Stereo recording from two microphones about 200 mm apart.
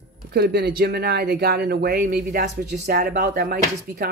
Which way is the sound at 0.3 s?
55° right (ahead or behind).